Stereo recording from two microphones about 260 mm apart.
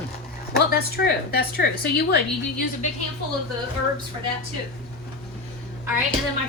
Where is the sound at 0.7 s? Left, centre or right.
Left.